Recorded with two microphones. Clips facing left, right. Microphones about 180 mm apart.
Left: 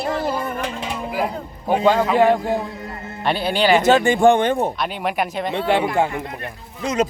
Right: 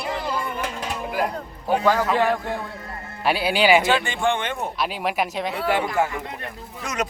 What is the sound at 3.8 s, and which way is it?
Speech, 40° left (ahead or behind).